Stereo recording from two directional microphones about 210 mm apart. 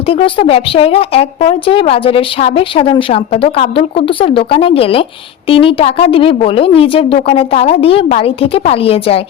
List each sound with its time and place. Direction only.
0.1 s a woman's voice: 25° left (ahead or behind)